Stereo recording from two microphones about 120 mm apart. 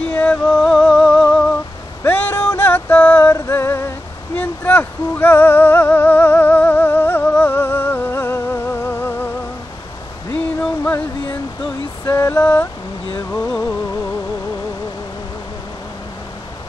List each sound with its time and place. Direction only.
0.0 s music: 10° left (ahead or behind)
2.0 s music: 15° left (ahead or behind)
10.6 s music: 10° left (ahead or behind)
12.1 s a sound: 25° left (ahead or behind)
13.3 s music: 15° left (ahead or behind)